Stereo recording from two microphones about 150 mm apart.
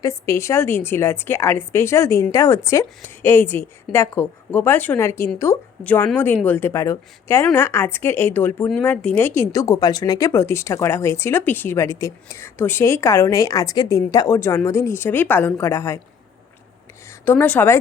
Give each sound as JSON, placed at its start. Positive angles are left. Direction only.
{"t": 0.0, "sound": "a woman's voice", "side_deg": 20}
{"t": 17.1, "sound": "speech", "side_deg": 10}